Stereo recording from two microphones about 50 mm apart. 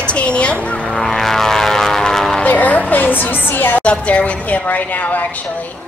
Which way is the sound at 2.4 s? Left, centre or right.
Left.